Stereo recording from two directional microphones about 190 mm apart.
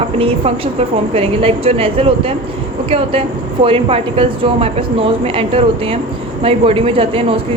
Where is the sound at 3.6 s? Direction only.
30° right (ahead or behind).